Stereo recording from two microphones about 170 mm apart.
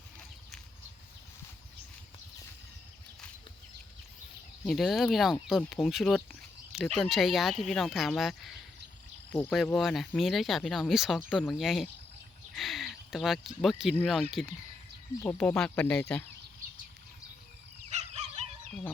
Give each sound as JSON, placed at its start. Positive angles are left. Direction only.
{"t": 4.6, "sound": "speech", "side_deg": 0}
{"t": 9.7, "sound": "speech", "side_deg": 0}
{"t": 12.5, "sound": "a sound", "side_deg": 0}
{"t": 13.6, "sound": "speech", "side_deg": 0}
{"t": 15.2, "sound": "speech", "side_deg": 10}
{"t": 17.8, "sound": "fowl", "side_deg": -40}